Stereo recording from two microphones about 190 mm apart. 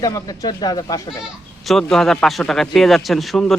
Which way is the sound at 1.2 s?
Centre (ahead or behind).